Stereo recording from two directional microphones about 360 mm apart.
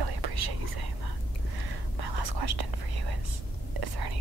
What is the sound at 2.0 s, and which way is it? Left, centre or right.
Whispering, right.